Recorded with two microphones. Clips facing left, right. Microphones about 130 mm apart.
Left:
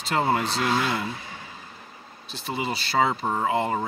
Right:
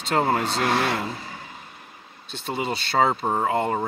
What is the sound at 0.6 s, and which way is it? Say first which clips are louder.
Speech: right 2 dB; 60° right (ahead or behind).